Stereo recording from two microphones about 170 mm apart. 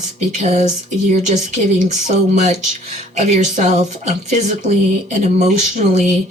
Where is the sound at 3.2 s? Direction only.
45° right (ahead or behind).